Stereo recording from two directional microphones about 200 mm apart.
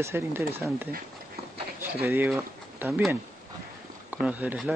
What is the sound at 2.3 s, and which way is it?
Speech, 10° right (ahead or behind).